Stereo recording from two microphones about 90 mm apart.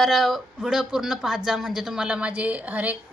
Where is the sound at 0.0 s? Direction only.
Centre (ahead or behind).